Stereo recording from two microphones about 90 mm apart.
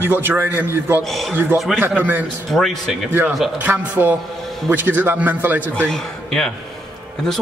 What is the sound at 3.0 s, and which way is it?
A man's voice, 25° right (ahead or behind).